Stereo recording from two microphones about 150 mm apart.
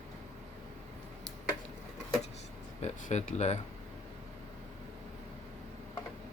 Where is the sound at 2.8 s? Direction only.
50° left (ahead or behind).